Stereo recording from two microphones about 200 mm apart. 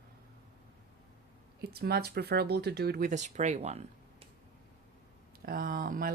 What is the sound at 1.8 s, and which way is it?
Speech, 50° right (ahead or behind).